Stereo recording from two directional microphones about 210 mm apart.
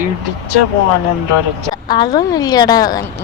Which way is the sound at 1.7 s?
20° left (ahead or behind).